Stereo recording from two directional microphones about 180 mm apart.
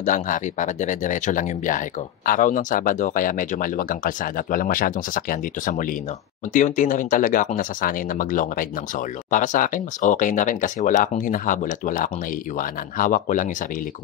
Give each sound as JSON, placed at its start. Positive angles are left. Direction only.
{"t": 0.0, "sound": "speech", "side_deg": 45}